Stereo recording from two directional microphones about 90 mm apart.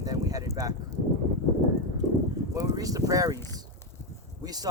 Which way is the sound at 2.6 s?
40° right (ahead or behind).